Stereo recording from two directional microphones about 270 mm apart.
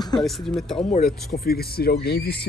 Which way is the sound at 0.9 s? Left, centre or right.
Left.